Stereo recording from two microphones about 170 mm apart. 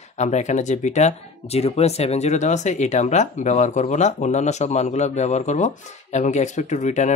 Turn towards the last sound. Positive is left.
turn(degrees=45)  # may be behind; listen again after turning